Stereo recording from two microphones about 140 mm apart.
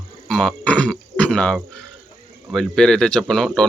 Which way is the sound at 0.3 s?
5° left (ahead or behind).